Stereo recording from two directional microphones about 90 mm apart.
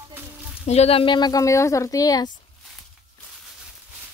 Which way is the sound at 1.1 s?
45° left (ahead or behind).